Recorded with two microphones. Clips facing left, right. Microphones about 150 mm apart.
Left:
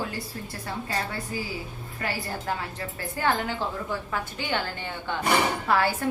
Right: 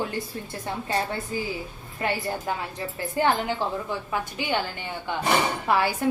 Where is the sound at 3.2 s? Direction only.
20° right (ahead or behind).